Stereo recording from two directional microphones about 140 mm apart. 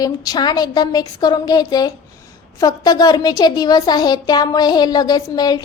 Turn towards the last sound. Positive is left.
turn(degrees=30)  # may be behind; listen again after turning